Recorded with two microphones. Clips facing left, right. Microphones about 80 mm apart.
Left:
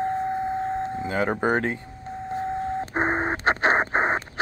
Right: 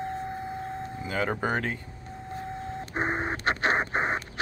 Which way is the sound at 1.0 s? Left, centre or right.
Left.